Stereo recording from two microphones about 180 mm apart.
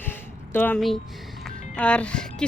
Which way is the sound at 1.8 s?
5° left (ahead or behind).